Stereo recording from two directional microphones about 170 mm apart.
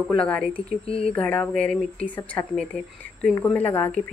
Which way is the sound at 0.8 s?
35° left (ahead or behind).